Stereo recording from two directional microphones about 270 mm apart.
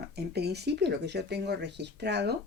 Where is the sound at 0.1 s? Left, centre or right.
Right.